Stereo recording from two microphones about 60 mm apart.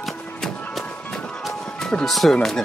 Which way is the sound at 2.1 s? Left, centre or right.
Centre.